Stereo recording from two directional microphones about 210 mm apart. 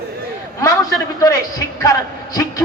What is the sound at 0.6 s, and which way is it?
A woman's voice, 15° left (ahead or behind).